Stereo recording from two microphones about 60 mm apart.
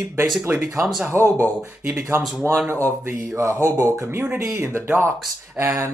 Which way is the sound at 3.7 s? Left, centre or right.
Right.